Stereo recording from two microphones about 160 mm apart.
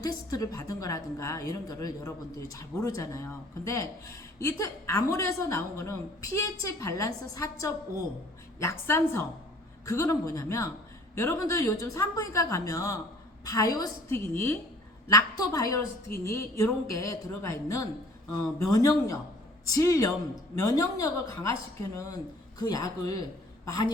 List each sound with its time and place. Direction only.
0.0 s a woman's voice: 20° left (ahead or behind)